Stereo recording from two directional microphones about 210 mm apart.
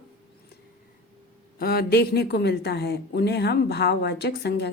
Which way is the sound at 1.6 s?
45° left (ahead or behind).